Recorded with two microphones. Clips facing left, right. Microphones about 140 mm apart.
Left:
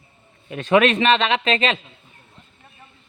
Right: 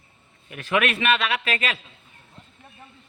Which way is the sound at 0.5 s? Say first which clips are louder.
Left 7 dB; 30° left (ahead or behind).